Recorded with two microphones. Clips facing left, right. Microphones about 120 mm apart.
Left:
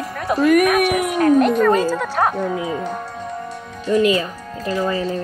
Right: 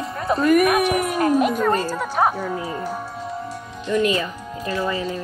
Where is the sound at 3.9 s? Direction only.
35° left (ahead or behind).